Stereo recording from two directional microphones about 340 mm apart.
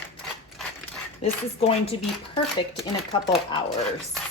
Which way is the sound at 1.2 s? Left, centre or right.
Centre.